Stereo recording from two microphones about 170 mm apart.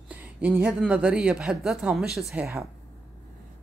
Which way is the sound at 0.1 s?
10° right (ahead or behind).